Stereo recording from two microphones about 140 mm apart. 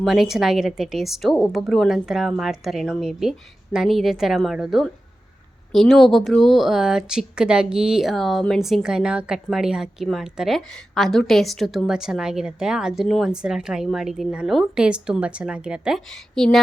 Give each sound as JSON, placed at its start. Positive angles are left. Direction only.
{"t": 0.0, "sound": "a woman's voice", "side_deg": 0}